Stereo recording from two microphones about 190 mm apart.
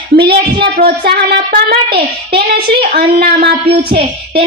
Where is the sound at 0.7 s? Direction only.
55° right (ahead or behind).